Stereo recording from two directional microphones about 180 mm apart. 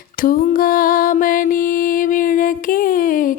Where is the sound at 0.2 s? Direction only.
50° left (ahead or behind).